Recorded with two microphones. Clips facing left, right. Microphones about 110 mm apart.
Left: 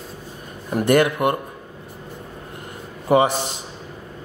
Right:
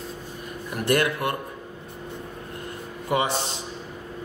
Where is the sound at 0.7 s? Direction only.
25° left (ahead or behind).